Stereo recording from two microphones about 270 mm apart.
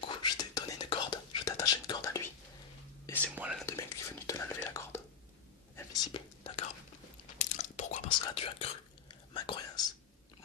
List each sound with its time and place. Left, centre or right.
0.0 s whispering: centre